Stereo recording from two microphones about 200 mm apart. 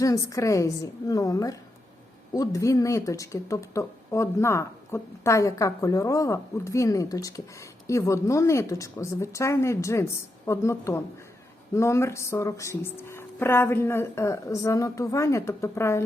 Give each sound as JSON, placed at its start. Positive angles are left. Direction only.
{"t": 0.0, "sound": "speech", "side_deg": 15}